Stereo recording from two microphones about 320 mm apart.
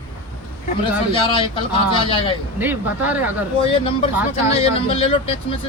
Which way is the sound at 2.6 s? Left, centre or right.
Centre.